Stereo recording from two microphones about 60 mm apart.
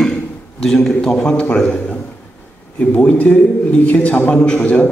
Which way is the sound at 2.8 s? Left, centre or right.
Left.